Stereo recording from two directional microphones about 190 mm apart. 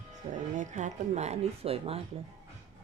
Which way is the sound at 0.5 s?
40° right (ahead or behind).